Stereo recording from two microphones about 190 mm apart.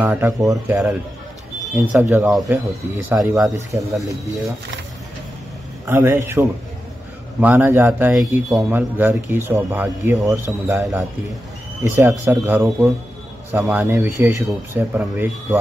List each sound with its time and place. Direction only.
0.0 s speech: 10° right (ahead or behind)
3.7 s speech: 20° right (ahead or behind)
6.0 s speech: 15° right (ahead or behind)
11.9 s speech: 15° right (ahead or behind)